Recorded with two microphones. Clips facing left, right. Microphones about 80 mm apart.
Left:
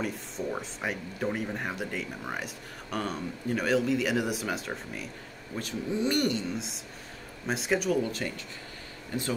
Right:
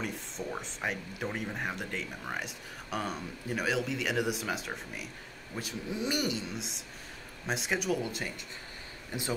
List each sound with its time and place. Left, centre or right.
0.0 s speech: centre
5.6 s speech: centre